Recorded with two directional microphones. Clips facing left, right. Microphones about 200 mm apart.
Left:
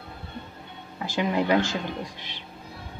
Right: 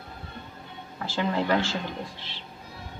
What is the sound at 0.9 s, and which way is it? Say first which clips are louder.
Speech: left 2 dB; 15° left (ahead or behind).